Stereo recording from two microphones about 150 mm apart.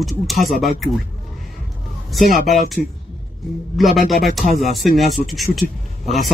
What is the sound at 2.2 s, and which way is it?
Speech, 65° left (ahead or behind).